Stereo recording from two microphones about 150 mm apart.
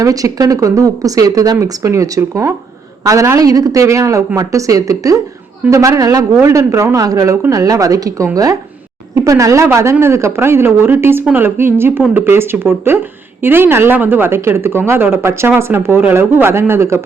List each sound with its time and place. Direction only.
0.0 s speech: 25° right (ahead or behind)